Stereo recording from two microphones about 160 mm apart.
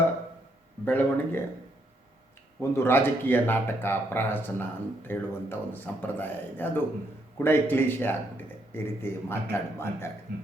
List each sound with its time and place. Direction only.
0.9 s speech: 10° left (ahead or behind)
2.6 s speech: 15° left (ahead or behind)
10.3 s speech: 70° right (ahead or behind)